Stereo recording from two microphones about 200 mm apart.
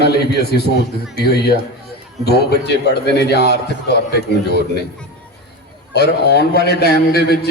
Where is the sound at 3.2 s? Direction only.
55° left (ahead or behind).